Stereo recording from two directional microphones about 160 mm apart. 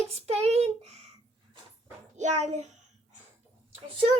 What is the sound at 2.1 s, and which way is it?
Speech, 45° right (ahead or behind).